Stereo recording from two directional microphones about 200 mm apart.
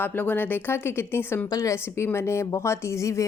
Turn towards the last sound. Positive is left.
turn(degrees=15)  # may be behind; listen again after turning